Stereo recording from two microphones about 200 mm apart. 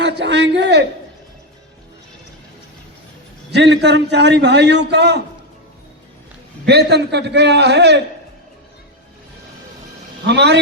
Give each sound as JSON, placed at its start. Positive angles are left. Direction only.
{"t": 0.0, "sound": "a sound", "side_deg": -60}
{"t": 3.5, "sound": "a man's voice", "side_deg": -60}
{"t": 6.7, "sound": "a man's voice", "side_deg": -55}
{"t": 10.2, "sound": "a man's voice", "side_deg": -55}